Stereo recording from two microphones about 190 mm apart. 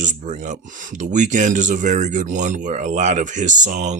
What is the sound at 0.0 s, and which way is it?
Speech, 40° right (ahead or behind).